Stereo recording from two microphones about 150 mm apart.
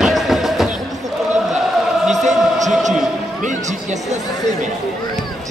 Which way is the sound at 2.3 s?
55° right (ahead or behind).